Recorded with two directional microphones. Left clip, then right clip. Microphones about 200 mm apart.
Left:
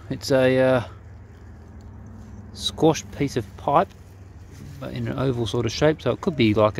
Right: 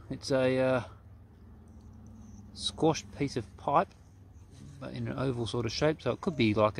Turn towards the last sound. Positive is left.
turn(degrees=0)  # may be behind; listen again after turning